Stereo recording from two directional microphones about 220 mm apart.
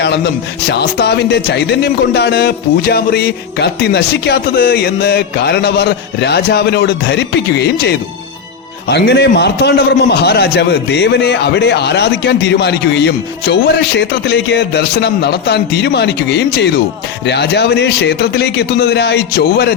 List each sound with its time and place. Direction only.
0.0 s speech: 50° left (ahead or behind)